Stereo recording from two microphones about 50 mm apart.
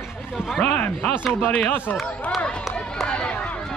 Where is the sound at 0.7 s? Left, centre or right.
Left.